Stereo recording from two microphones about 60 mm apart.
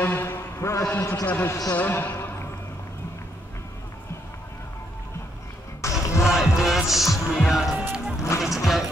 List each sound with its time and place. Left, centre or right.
0.0 s a sound: left
1.2 s speech: left
5.8 s music: left
6.2 s music: centre
8.4 s speech: centre